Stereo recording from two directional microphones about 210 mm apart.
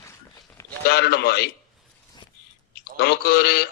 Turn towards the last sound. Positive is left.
turn(degrees=50)  # may be behind; listen again after turning